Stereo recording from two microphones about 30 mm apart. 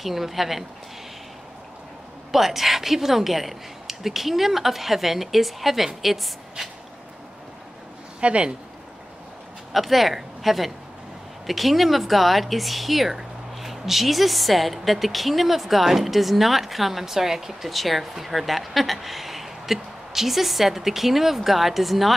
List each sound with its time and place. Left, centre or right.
0.0 s speech: centre
2.3 s a woman's voice: centre
8.2 s speech: right
9.7 s a woman's voice: centre
17.6 s speech: centre